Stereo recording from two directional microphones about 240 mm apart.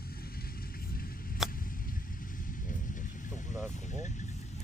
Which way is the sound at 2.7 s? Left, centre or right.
Left.